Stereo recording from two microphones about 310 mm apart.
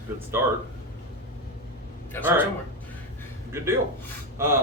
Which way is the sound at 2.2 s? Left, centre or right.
Centre.